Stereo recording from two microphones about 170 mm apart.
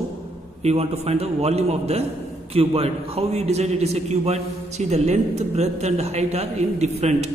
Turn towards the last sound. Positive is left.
turn(degrees=-40)  # may be behind; listen again after turning